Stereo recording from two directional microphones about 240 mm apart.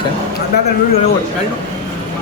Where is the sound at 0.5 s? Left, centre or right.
Left.